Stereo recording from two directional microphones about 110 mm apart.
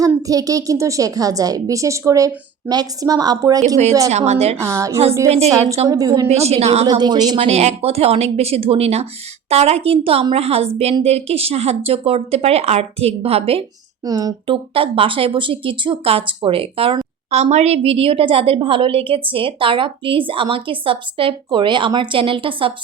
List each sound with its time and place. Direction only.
0.0 s a woman's voice: 30° right (ahead or behind)
4.1 s speech: 85° right
4.6 s a woman's voice: 25° right (ahead or behind)
5.6 s speech: 70° right (ahead or behind)
5.9 s a woman's voice: 35° right (ahead or behind)
6.2 s speech: 75° right (ahead or behind)
7.0 s a woman's voice: 40° right (ahead or behind)
7.3 s speech: 65° right (ahead or behind)
14.0 s a woman's voice: 35° right (ahead or behind)
14.4 s speech: 55° right (ahead or behind)
17.3 s a woman's voice: 90° right; by 22.7 s 50° right (ahead or behind)